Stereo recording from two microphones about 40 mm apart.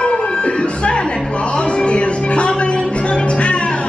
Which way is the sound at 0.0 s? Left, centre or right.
Left.